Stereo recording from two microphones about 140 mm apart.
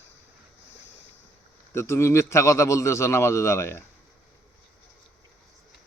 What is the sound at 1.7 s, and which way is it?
A man's voice, 20° left (ahead or behind).